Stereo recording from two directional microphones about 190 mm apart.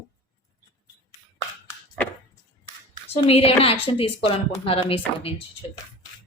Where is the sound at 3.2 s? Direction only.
30° left (ahead or behind).